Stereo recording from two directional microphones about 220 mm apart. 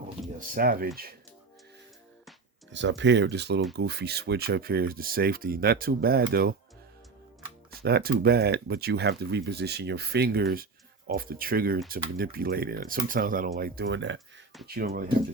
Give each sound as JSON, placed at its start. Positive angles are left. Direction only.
{"t": 0.3, "sound": "speech", "side_deg": -40}
{"t": 2.7, "sound": "speech", "side_deg": -55}
{"t": 7.7, "sound": "speech", "side_deg": -45}
{"t": 14.8, "sound": "speech", "side_deg": -45}